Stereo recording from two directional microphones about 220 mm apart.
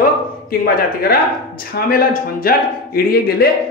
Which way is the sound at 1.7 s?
40° left (ahead or behind).